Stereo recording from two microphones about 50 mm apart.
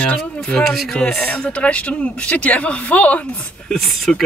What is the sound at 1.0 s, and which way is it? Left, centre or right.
Speech, left.